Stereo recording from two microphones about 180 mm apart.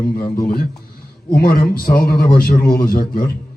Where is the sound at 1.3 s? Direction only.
50° left (ahead or behind).